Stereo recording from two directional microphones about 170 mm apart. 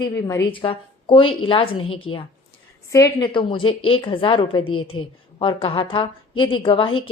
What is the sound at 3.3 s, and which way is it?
A woman's voice, 30° left (ahead or behind).